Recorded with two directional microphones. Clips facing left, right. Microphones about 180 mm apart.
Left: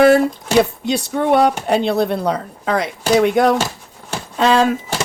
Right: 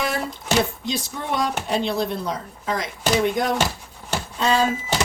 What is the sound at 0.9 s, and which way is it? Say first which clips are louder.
Speech: left 10 dB; 65° left (ahead or behind).